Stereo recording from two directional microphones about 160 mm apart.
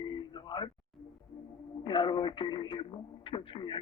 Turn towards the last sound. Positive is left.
turn(degrees=30)  # may be behind; listen again after turning